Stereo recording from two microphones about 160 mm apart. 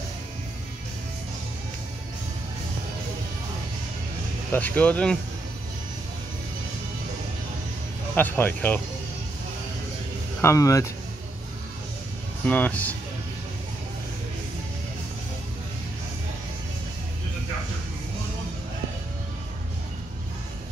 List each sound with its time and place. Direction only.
4.5 s speech: 10° left (ahead or behind)
8.2 s speech: 10° left (ahead or behind)
10.4 s speech: 20° left (ahead or behind)
12.4 s speech: 10° left (ahead or behind)